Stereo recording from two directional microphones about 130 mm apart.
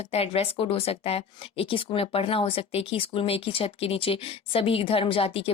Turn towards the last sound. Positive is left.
turn(degrees=45)  # may be behind; listen again after turning